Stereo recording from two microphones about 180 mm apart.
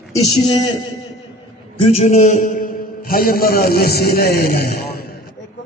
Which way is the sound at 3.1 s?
55° left (ahead or behind).